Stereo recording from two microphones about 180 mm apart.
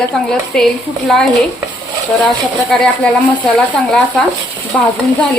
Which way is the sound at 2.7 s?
5° left (ahead or behind).